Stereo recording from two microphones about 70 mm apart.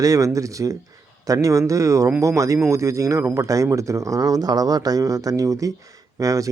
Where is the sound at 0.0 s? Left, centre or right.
Right.